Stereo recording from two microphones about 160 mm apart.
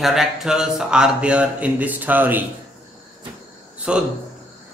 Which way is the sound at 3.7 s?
5° right (ahead or behind).